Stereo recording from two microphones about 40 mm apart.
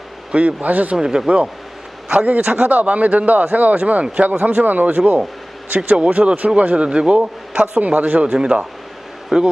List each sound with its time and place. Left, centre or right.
0.3 s a man's voice: right
0.9 s a man's voice: centre
2.1 s a man's voice: right
7.8 s a man's voice: right
8.3 s a man's voice: centre